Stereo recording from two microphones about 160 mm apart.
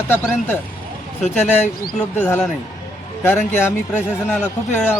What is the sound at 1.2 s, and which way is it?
Speech, 45° left (ahead or behind).